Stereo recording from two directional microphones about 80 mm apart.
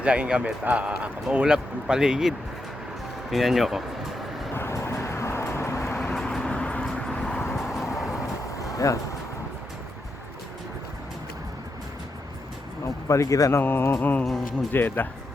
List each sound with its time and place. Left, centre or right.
0.0 s speech: centre
4.5 s vehicle: left
5.9 s vehicle: centre
7.5 s vehicle: centre
8.5 s vehicle: left
12.8 s speech: left
13.6 s music: left